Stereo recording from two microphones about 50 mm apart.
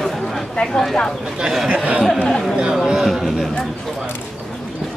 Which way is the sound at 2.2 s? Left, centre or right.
Centre.